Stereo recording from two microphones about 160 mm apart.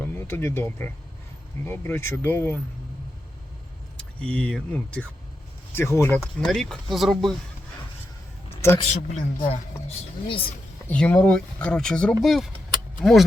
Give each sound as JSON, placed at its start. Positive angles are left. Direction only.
{"t": 0.0, "sound": "speech", "side_deg": 15}
{"t": 3.9, "sound": "speech", "side_deg": 5}
{"t": 6.1, "sound": "speech", "side_deg": 0}
{"t": 8.8, "sound": "speech", "side_deg": 45}
{"t": 10.8, "sound": "speech", "side_deg": 10}